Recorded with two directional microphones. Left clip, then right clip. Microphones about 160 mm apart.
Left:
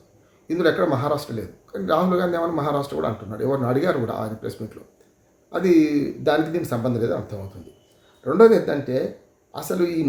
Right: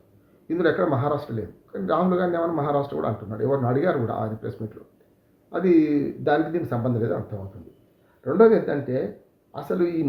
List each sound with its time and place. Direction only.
0.4 s speech: 15° left (ahead or behind)